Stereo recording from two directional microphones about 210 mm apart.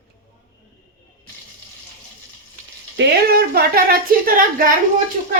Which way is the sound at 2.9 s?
45° right (ahead or behind).